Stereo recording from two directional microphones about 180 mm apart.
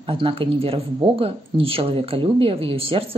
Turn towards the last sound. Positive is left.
turn(degrees=-30)  # may be behind; listen again after turning